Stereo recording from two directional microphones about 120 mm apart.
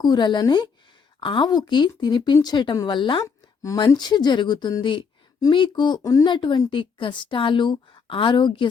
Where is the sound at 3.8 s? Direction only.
35° left (ahead or behind).